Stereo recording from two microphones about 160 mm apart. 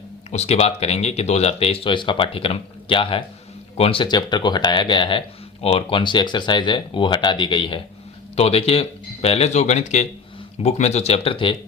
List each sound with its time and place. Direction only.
0.3 s speech: 40° left (ahead or behind)